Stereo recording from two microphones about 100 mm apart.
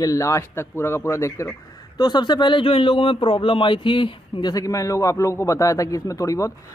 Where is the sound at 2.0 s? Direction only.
45° left (ahead or behind).